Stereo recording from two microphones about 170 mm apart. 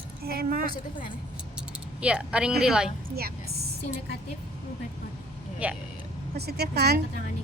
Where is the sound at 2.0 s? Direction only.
5° right (ahead or behind).